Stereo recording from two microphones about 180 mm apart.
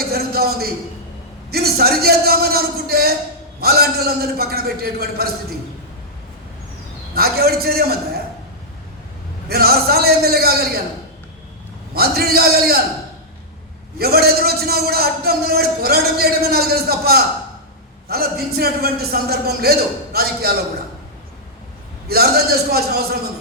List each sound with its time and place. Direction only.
0.1 s a sound: 60° right (ahead or behind)
1.5 s a man's voice: 60° right (ahead or behind)
7.1 s a man's voice: 60° right (ahead or behind)
9.5 s a man's voice: 60° right (ahead or behind)
11.9 s a man's voice: 60° right (ahead or behind)
14.0 s a man's voice: 60° right (ahead or behind)
22.0 s a man's voice: 60° right (ahead or behind)